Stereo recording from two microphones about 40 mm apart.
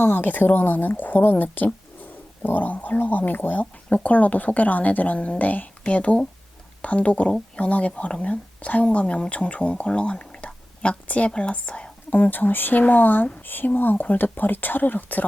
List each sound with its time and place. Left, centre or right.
0.0 s speech: left
3.6 s speech: left
12.1 s speech: left